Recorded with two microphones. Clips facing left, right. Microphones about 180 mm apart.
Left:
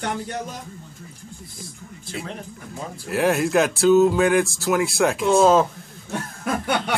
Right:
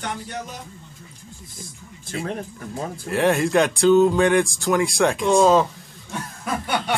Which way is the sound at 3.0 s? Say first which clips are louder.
Right 1 dB; 5° left (ahead or behind).